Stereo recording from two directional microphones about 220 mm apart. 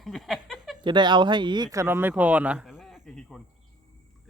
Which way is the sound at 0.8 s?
20° right (ahead or behind).